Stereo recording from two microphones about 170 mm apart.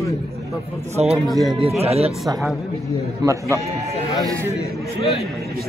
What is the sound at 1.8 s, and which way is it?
Speech, 35° right (ahead or behind).